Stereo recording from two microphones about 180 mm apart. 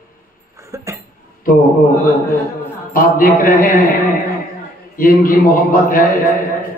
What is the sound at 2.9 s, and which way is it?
Speech, 50° left (ahead or behind).